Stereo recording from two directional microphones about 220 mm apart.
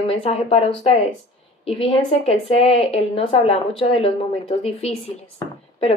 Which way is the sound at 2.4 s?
25° left (ahead or behind).